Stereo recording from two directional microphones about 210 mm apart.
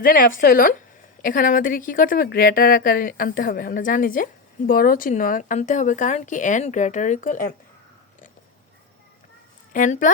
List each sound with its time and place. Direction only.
0.0 s a woman's voice: 45° left (ahead or behind)
9.7 s a woman's voice: 40° left (ahead or behind)